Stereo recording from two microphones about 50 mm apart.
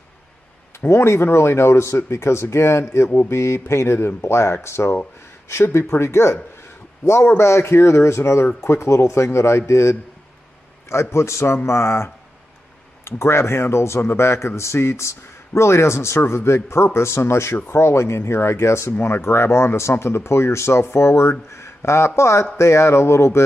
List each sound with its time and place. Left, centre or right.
0.7 s speech: left